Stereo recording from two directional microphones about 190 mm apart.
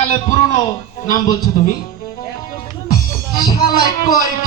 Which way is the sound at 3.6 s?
50° left (ahead or behind).